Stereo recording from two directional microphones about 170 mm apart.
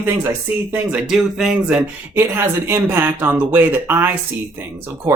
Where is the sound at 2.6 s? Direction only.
10° right (ahead or behind).